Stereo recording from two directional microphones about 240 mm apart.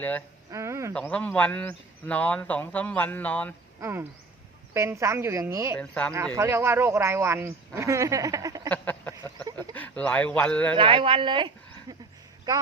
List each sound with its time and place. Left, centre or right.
0.5 s speech: centre
0.9 s speech: centre
3.8 s speech: centre
5.8 s speech: centre
6.3 s speech: centre
8.7 s a sound: centre
9.6 s speech: centre
10.8 s speech: right